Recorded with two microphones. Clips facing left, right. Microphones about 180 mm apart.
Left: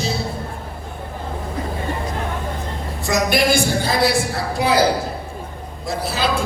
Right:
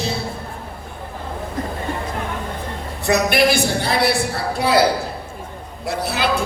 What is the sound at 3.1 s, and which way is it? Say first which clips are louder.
A man's voice: right 1 dB; 65° right (ahead or behind).